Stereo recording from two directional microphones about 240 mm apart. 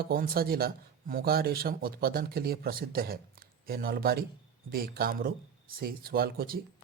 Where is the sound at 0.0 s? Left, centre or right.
Right.